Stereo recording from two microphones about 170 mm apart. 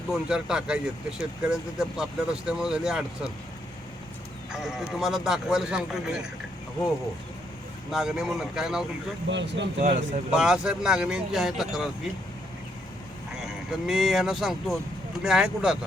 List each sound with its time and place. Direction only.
0.1 s speech: 5° right (ahead or behind)
4.5 s speech: centre (ahead or behind)
7.9 s speech: 5° right (ahead or behind)
9.3 s speech: 90° right
9.8 s speech: 45° right (ahead or behind)
10.3 s speech: 5° right (ahead or behind)
13.3 s speech: 5° right (ahead or behind)